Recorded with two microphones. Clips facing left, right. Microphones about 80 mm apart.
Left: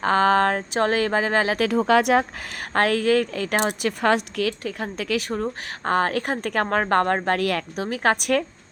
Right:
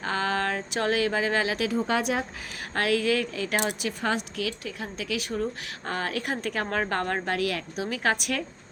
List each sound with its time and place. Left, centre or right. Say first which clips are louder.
0.0 s a woman's voice: left 9 dB; left
1.6 s a woman's voice: left 7 dB; left
4.0 s a woman's voice: left 8 dB; left
7.9 s a woman's voice: left 5 dB; left
8.1 s a woman's voice: left 7 dB; left